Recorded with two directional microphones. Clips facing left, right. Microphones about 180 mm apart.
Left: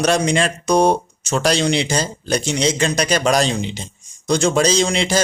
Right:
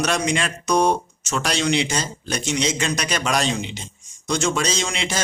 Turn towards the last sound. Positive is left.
turn(degrees=35)  # may be behind; listen again after turning